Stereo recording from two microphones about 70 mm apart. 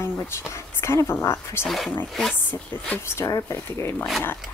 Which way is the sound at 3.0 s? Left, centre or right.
Left.